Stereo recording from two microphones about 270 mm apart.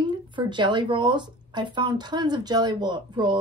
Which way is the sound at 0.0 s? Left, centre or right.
Centre.